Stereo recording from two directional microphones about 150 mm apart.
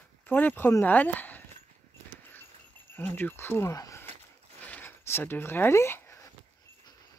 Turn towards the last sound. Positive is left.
turn(degrees=15)  # may be behind; listen again after turning